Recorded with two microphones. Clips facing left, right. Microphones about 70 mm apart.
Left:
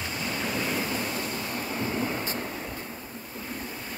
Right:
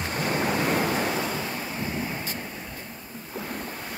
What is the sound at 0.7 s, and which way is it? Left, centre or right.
Waves, right.